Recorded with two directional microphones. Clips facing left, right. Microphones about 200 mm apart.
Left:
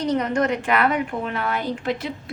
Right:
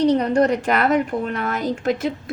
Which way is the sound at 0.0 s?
35° right (ahead or behind).